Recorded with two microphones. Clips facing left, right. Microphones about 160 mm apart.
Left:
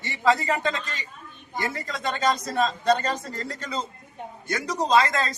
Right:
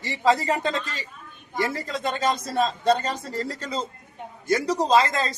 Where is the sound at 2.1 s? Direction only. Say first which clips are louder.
Left 1 dB; 30° right (ahead or behind).